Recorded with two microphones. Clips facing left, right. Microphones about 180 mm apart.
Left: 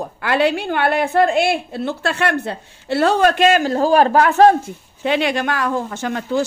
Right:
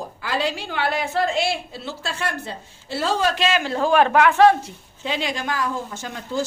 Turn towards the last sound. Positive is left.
turn(degrees=65)  # may be behind; listen again after turning